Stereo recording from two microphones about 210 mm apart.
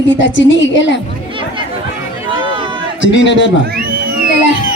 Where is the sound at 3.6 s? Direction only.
45° right (ahead or behind).